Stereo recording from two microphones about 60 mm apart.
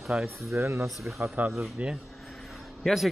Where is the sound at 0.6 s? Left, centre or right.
Right.